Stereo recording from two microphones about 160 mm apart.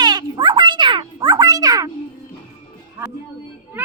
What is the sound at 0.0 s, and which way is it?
Music, 25° right (ahead or behind).